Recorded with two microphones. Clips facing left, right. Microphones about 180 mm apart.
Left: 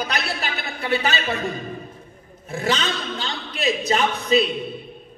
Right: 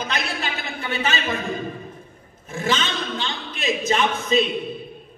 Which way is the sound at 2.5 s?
35° left (ahead or behind).